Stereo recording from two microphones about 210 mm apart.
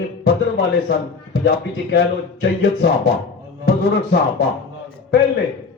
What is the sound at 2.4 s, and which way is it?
Speech, 55° left (ahead or behind).